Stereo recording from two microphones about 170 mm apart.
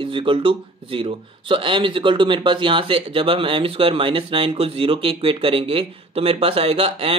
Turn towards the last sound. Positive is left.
turn(degrees=-35)  # may be behind; listen again after turning